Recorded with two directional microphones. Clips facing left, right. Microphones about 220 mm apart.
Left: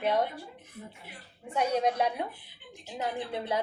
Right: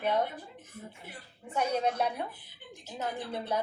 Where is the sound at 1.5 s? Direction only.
10° left (ahead or behind).